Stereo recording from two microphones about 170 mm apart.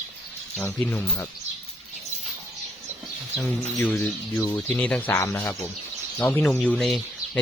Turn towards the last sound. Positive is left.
turn(degrees=0)  # may be behind; listen again after turning